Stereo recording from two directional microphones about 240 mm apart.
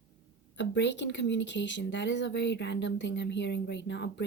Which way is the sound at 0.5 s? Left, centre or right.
Left.